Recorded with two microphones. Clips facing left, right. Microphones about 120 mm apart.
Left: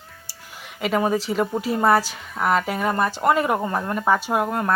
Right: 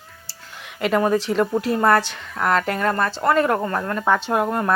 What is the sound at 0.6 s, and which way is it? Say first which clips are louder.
Speech: right 2 dB; centre (ahead or behind).